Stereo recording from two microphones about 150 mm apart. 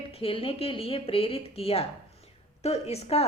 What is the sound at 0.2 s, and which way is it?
A woman's voice, 40° left (ahead or behind).